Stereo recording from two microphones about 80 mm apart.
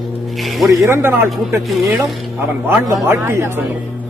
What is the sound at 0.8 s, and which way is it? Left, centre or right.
Speech, right.